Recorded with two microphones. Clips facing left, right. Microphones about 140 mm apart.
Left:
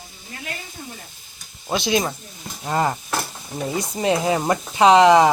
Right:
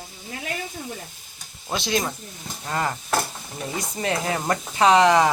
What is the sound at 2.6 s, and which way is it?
Stir, 25° left (ahead or behind).